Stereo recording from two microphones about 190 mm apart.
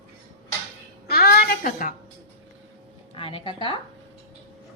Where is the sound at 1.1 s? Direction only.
55° left (ahead or behind).